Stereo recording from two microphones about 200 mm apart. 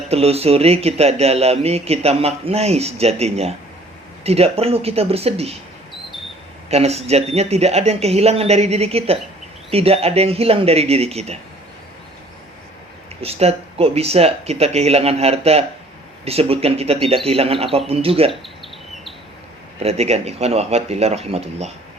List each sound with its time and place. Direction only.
0.1 s speech: 30° right (ahead or behind)
6.7 s speech: 30° right (ahead or behind)
13.2 s speech: 30° right (ahead or behind)
19.8 s speech: 30° right (ahead or behind)